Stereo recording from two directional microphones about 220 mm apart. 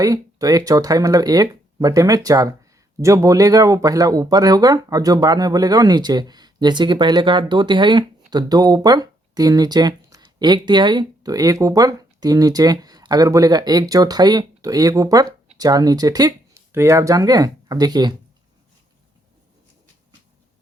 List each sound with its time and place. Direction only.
0.0 s speech: 15° right (ahead or behind)